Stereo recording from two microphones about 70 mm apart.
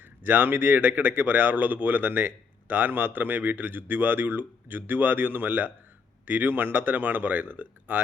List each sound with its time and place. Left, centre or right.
0.0 s speech: right